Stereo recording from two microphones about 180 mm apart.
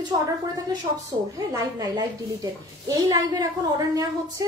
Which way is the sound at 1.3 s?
20° right (ahead or behind).